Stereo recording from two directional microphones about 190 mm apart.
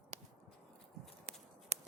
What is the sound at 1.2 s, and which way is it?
Walk, 35° right (ahead or behind).